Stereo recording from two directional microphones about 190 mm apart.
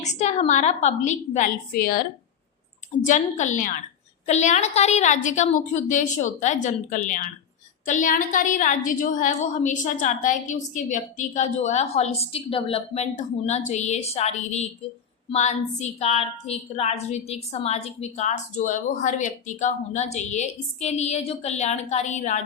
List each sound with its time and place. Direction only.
0.0 s a woman's voice: 35° left (ahead or behind)